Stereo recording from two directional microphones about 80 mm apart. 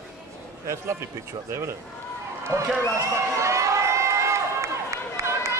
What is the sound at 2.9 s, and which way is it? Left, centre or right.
Run, right.